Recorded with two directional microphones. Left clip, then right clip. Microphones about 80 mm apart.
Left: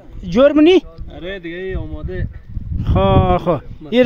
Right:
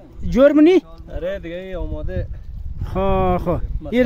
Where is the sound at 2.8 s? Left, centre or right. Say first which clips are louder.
Left 4 dB; centre.